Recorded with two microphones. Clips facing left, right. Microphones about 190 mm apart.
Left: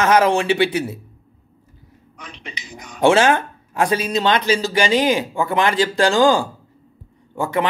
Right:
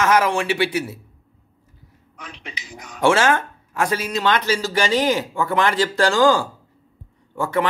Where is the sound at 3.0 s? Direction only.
20° left (ahead or behind).